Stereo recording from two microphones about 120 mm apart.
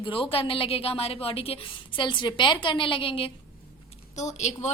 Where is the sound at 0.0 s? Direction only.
45° left (ahead or behind).